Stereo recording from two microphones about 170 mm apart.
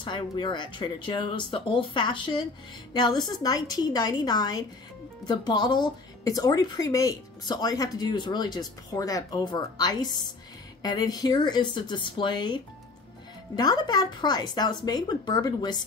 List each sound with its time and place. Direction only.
0.0 s speech: 25° left (ahead or behind)